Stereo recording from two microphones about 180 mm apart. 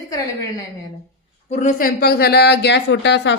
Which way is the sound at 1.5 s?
45° left (ahead or behind).